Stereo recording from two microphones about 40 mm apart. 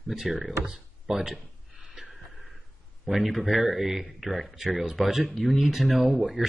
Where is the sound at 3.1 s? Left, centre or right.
Centre.